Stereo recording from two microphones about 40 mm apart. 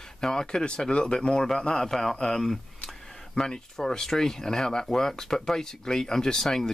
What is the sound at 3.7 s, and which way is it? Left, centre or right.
Speech, centre.